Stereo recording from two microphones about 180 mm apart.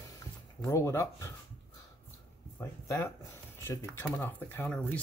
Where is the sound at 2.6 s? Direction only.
15° left (ahead or behind).